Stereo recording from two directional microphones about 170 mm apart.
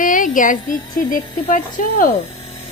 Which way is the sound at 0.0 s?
50° left (ahead or behind).